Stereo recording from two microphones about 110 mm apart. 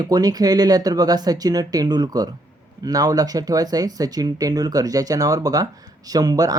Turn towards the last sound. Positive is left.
turn(degrees=-35)  # may be behind; listen again after turning